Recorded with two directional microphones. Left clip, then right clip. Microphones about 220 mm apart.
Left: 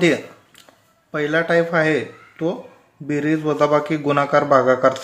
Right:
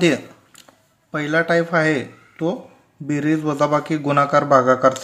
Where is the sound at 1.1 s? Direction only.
25° right (ahead or behind).